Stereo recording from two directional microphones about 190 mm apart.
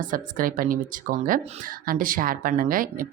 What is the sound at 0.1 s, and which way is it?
Speech, 45° right (ahead or behind).